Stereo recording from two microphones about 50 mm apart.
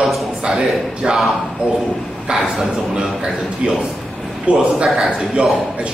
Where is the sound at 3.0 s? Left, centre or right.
Right.